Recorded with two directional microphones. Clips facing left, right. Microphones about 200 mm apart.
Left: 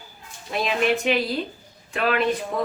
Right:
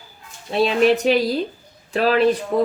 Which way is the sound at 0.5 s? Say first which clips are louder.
Right 6 dB; 35° right (ahead or behind).